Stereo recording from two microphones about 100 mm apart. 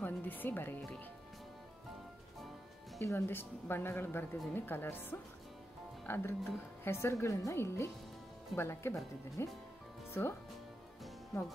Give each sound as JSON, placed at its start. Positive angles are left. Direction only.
{"t": 0.0, "sound": "speech", "side_deg": 20}
{"t": 3.0, "sound": "speech", "side_deg": 30}